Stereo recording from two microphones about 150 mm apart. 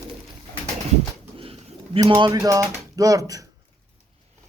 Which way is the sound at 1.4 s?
40° right (ahead or behind).